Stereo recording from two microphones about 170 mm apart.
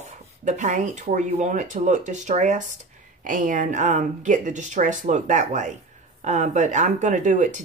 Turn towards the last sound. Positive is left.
turn(degrees=-45)  # may be behind; listen again after turning